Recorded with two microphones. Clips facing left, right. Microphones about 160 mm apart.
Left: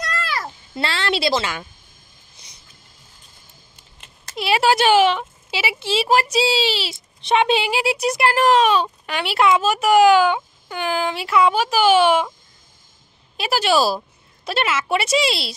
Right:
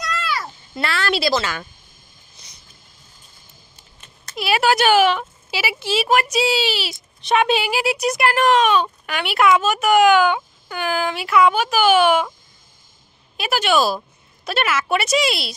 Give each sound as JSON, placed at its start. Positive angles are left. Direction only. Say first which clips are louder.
{"t": 0.0, "sound": "a sound", "louder": "right 1 dB", "side_deg": 50}
{"t": 0.7, "sound": "speech", "louder": "right 1 dB", "side_deg": 25}
{"t": 4.4, "sound": "speech", "louder": "even", "side_deg": 25}
{"t": 13.4, "sound": "speech", "louder": "even", "side_deg": 30}